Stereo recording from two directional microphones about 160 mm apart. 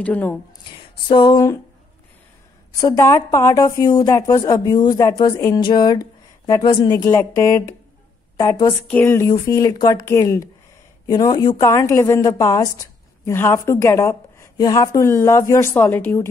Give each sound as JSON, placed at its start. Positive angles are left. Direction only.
{"t": 0.0, "sound": "a woman's voice", "side_deg": 10}
{"t": 0.7, "sound": "a sound", "side_deg": 30}
{"t": 3.0, "sound": "a woman's voice", "side_deg": 15}
{"t": 8.8, "sound": "a woman's voice", "side_deg": 10}